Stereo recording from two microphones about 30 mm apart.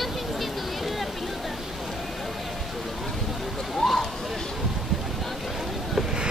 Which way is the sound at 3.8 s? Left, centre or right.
Centre.